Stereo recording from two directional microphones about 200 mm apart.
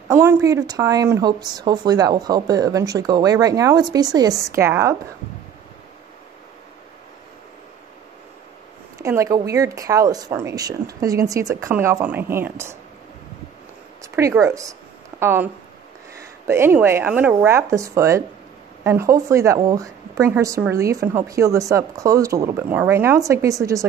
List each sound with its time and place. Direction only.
0.1 s a woman's voice: 15° right (ahead or behind)
9.0 s a woman's voice: 15° right (ahead or behind)
14.1 s a woman's voice: 15° right (ahead or behind)